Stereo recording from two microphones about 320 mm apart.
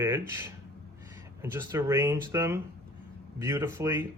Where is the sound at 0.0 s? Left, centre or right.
Centre.